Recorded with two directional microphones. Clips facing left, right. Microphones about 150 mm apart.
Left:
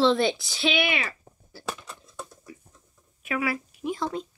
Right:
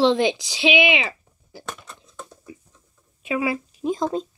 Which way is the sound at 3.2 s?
20° right (ahead or behind).